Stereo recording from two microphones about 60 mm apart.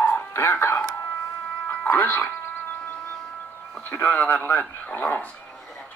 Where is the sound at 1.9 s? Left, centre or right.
Left.